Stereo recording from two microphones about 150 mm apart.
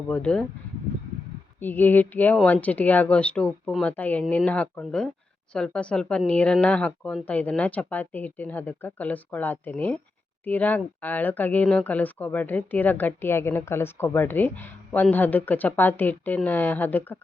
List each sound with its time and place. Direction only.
0.1 s speech: 5° left (ahead or behind)
1.5 s speech: 15° left (ahead or behind)